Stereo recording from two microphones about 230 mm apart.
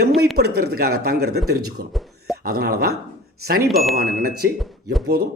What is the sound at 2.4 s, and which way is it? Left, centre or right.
A man's voice, right.